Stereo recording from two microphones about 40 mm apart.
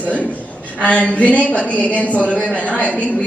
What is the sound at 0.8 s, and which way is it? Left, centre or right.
A man's voice, left.